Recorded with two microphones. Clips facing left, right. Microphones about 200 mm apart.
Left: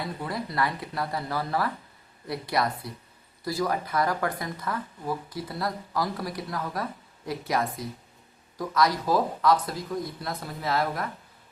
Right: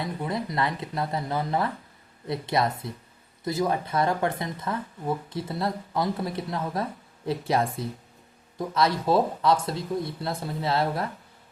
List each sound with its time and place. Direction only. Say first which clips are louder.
0.0 s speech: right 3 dB; 20° right (ahead or behind)